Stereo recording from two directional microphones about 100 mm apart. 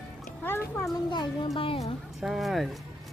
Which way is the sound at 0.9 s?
45° left (ahead or behind).